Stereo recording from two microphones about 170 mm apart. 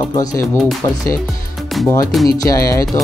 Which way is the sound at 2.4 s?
20° left (ahead or behind).